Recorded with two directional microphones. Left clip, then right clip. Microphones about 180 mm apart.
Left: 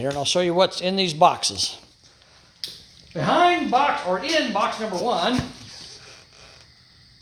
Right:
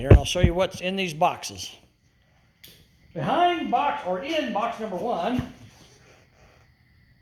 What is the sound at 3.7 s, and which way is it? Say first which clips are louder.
Speech: left 4 dB; 25° left (ahead or behind).